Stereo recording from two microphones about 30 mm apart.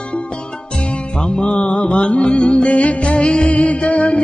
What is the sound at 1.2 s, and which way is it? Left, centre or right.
Music, left.